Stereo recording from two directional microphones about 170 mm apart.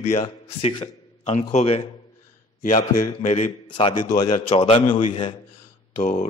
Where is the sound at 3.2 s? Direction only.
40° left (ahead or behind).